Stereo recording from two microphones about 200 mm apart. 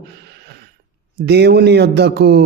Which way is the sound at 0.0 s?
55° right (ahead or behind).